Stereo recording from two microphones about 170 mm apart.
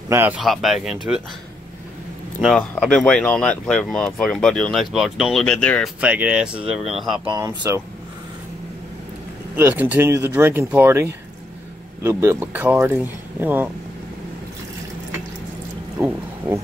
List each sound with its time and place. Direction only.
0.1 s speech: 10° right (ahead or behind)
0.4 s speech: centre (ahead or behind)
2.9 s speech: 5° left (ahead or behind)
5.9 s speech: 10° right (ahead or behind)
7.2 s speech: 20° right (ahead or behind)
9.6 s speech: 10° right (ahead or behind)
16.0 s speech: 10° right (ahead or behind)